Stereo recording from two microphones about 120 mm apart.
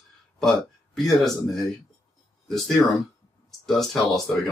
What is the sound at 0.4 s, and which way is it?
Speech, 5° left (ahead or behind).